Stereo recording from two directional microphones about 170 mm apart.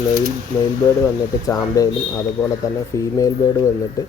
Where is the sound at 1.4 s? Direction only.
20° left (ahead or behind).